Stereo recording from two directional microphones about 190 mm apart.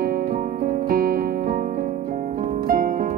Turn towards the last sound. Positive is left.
turn(degrees=-45)  # may be behind; listen again after turning